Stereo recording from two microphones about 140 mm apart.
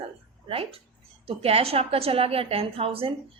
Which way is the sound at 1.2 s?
45° right (ahead or behind).